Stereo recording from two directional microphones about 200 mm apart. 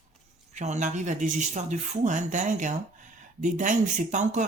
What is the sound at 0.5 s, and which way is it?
Speech, 35° right (ahead or behind).